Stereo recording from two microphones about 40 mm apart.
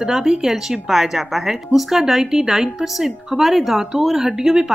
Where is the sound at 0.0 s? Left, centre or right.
Centre.